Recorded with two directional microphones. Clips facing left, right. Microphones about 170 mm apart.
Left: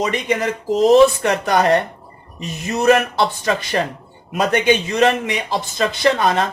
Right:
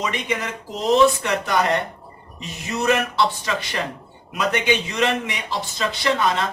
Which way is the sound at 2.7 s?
45° left (ahead or behind).